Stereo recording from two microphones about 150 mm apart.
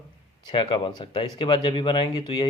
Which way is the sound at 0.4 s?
35° left (ahead or behind).